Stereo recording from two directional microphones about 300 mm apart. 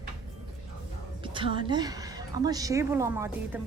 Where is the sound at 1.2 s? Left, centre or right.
Centre.